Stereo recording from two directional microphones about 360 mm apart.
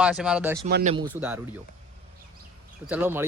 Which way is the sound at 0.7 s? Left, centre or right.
Right.